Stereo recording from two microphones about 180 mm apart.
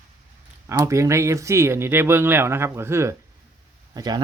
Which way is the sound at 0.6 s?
15° right (ahead or behind).